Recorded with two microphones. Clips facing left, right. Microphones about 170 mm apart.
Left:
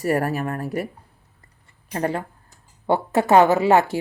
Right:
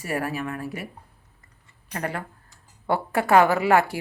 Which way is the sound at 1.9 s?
30° left (ahead or behind).